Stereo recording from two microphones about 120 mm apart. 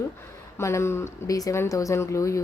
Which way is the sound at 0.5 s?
20° left (ahead or behind).